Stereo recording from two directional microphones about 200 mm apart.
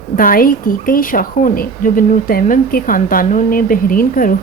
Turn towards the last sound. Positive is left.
turn(degrees=45)  # may be behind; listen again after turning